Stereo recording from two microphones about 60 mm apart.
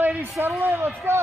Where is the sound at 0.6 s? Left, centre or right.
Right.